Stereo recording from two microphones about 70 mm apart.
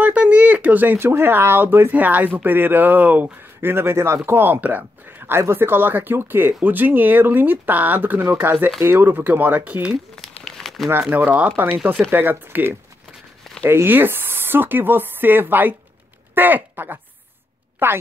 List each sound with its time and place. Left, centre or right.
0.0 s speech: centre
3.6 s a man's voice: right
10.1 s crumpling: centre
10.9 s a man's voice: right